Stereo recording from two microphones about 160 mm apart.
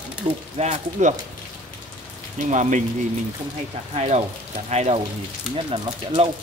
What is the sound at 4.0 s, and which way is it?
Speech, 40° right (ahead or behind).